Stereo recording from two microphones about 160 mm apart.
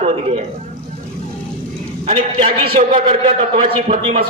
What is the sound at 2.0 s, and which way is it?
A man's voice, 40° right (ahead or behind).